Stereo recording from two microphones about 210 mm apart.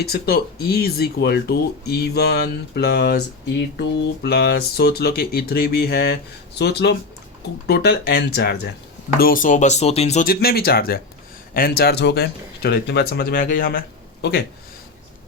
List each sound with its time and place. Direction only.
0.0 s speech: 45° left (ahead or behind)